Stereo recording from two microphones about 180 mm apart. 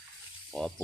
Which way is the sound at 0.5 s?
5° left (ahead or behind).